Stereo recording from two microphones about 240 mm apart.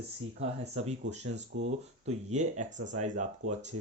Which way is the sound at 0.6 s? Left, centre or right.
Right.